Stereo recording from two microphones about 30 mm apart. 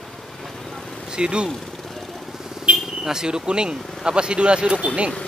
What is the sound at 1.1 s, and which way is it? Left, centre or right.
Speech, right.